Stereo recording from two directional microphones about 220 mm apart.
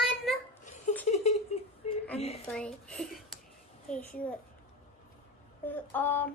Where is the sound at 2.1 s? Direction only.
30° left (ahead or behind).